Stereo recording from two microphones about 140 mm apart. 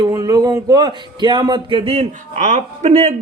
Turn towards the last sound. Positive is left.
turn(degrees=-55)  # may be behind; listen again after turning